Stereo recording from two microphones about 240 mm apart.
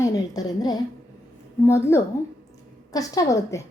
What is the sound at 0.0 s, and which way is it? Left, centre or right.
A woman's voice, centre.